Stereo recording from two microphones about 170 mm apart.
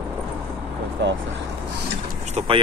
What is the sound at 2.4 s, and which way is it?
Speech, 40° right (ahead or behind).